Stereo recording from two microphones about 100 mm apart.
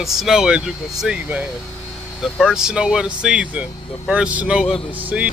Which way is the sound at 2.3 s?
5° right (ahead or behind).